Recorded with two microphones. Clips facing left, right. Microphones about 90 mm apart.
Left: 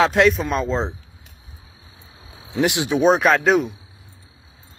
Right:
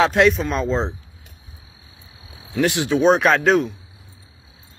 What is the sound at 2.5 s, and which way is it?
Speech, 20° left (ahead or behind).